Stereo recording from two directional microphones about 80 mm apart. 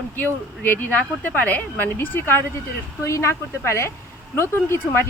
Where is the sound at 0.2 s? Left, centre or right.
Left.